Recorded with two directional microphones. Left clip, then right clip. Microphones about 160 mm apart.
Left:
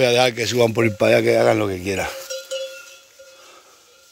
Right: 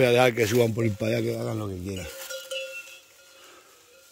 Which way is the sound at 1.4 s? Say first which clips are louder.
Left 16 dB; 60° left (ahead or behind).